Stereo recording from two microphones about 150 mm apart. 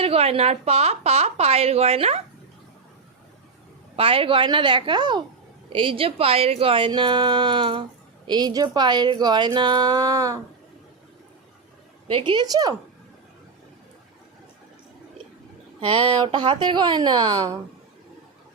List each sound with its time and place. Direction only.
0.0 s a woman's voice: 40° right (ahead or behind)
3.9 s a woman's voice: 40° right (ahead or behind)
12.0 s speech: 35° right (ahead or behind)
15.8 s speech: 35° right (ahead or behind)